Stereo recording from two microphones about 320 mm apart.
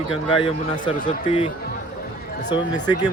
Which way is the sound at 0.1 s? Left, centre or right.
Centre.